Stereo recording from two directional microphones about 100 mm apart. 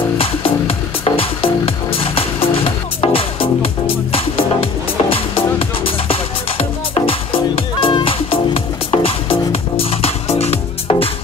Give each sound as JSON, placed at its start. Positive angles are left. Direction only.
{"t": 0.2, "sound": "music", "side_deg": 70}